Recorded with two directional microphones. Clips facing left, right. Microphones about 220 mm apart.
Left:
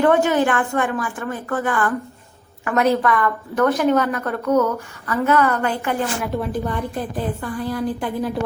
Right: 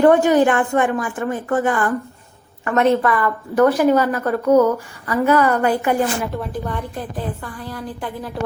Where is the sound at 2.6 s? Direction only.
Centre (ahead or behind).